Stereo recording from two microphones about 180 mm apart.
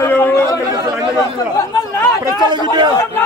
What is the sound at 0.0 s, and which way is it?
Chatter, 15° left (ahead or behind).